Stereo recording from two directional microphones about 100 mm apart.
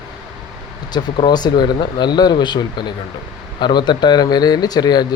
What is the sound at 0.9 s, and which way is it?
Speech, 45° left (ahead or behind).